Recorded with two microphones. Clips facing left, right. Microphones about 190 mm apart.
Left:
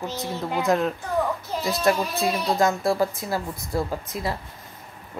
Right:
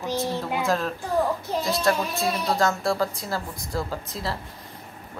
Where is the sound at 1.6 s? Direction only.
Centre (ahead or behind).